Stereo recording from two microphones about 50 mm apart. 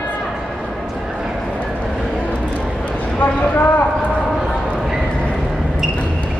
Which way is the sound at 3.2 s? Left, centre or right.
Left.